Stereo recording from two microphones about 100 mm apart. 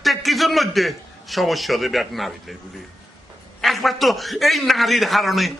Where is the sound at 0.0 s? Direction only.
Centre (ahead or behind).